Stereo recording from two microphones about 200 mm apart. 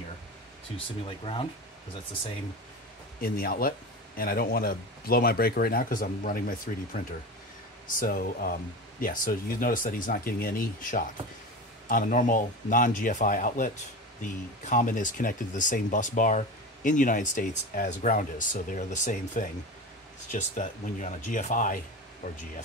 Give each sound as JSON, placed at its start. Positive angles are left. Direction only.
{"t": 0.7, "sound": "speech", "side_deg": 25}
{"t": 3.2, "sound": "speech", "side_deg": 45}
{"t": 8.0, "sound": "speech", "side_deg": 45}